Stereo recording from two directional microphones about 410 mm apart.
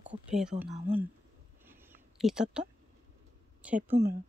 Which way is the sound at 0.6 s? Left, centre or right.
Right.